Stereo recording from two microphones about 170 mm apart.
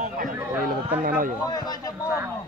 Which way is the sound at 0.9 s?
55° right (ahead or behind).